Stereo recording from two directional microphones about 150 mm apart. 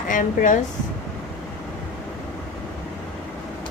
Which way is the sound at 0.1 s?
60° left (ahead or behind).